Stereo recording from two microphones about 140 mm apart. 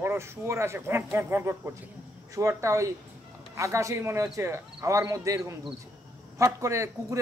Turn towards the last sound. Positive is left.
turn(degrees=-20)  # may be behind; listen again after turning